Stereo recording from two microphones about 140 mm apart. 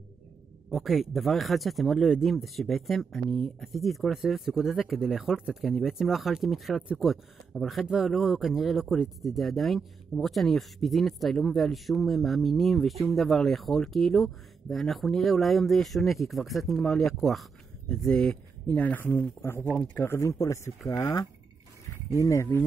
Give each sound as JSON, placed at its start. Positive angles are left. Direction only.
{"t": 0.7, "sound": "speech", "side_deg": 0}